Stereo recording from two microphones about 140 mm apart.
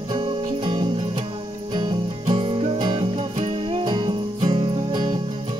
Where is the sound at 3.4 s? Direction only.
50° right (ahead or behind); by 5.2 s 35° right (ahead or behind).